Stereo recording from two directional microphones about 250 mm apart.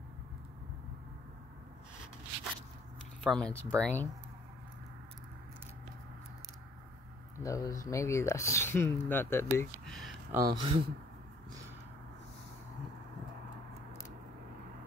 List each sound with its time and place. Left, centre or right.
3.3 s speech: centre
7.4 s speech: centre
10.3 s speech: centre